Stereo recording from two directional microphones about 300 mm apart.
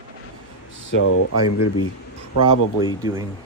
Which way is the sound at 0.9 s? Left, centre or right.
Left.